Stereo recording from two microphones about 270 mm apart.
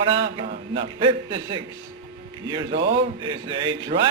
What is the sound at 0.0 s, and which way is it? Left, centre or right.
Speech, centre.